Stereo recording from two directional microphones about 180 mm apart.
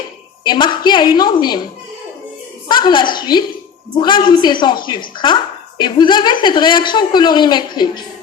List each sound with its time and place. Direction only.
0.4 s speech: 25° left (ahead or behind)
2.6 s a woman's voice: 25° left (ahead or behind)